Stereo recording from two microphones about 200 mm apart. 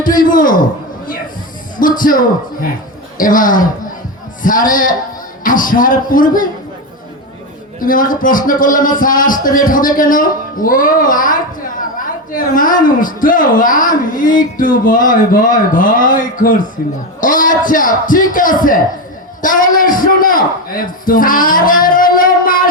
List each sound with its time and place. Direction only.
0.0 s a woman's voice: 45° left (ahead or behind)
1.8 s a woman's voice: 45° left (ahead or behind)
7.8 s a woman's voice: 45° left (ahead or behind)